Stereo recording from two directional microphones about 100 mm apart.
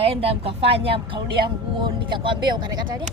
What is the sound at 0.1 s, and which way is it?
Speech, 75° right (ahead or behind).